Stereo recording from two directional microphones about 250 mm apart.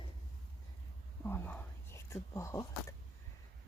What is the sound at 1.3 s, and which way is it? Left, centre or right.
Speech, centre.